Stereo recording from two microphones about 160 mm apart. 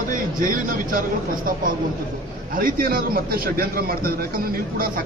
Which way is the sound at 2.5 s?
60° right (ahead or behind).